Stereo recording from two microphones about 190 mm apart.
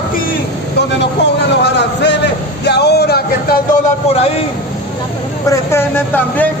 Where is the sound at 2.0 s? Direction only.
65° left (ahead or behind).